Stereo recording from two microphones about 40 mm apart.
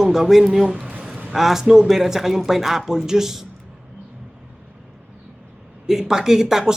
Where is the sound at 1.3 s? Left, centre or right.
Centre.